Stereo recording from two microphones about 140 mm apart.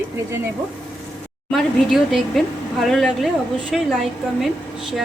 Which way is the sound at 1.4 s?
Centre (ahead or behind).